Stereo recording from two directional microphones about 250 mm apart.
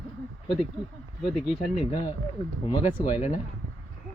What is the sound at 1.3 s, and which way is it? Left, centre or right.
Speech, centre.